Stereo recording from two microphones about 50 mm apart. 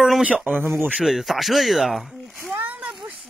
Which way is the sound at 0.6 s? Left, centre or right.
Right.